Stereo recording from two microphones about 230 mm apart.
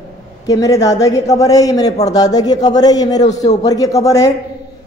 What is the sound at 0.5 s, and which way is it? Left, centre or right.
Speech, centre.